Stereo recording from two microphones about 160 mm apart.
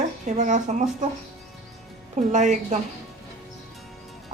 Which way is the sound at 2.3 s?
50° right (ahead or behind).